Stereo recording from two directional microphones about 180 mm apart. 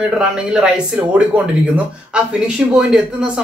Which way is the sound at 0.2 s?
5° right (ahead or behind).